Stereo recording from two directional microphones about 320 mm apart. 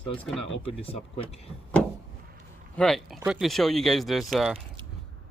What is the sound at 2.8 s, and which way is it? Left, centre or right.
Speech, centre.